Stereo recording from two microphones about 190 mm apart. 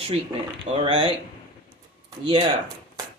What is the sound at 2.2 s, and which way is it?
Speech, 25° right (ahead or behind).